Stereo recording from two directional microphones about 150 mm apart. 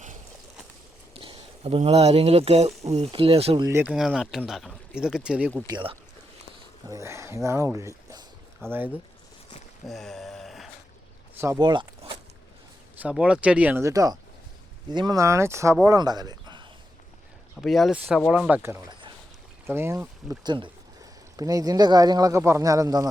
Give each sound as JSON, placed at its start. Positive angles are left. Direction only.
{"t": 1.1, "sound": "speech", "side_deg": -40}
{"t": 3.6, "sound": "speech", "side_deg": -15}
{"t": 3.9, "sound": "speech", "side_deg": 0}
{"t": 5.6, "sound": "speech", "side_deg": -35}
{"t": 6.8, "sound": "speech", "side_deg": -20}
{"t": 9.8, "sound": "a sound", "side_deg": 0}
{"t": 11.3, "sound": "speech", "side_deg": -20}
{"t": 11.6, "sound": "speech", "side_deg": -30}
{"t": 13.0, "sound": "speech", "side_deg": -10}
{"t": 17.6, "sound": "speech", "side_deg": 0}
{"t": 20.4, "sound": "speech", "side_deg": -30}